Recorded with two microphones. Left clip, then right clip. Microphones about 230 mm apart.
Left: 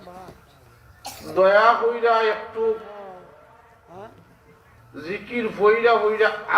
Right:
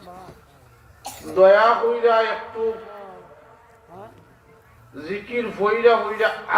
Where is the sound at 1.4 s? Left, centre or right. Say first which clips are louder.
Right 3 dB; left.